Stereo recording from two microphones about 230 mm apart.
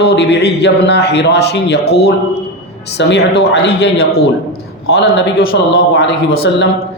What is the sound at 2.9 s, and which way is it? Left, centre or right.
A man's voice, left.